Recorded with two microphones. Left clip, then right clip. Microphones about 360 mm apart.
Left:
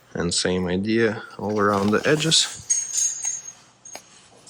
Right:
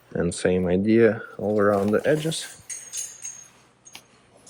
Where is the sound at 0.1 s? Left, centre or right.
Centre.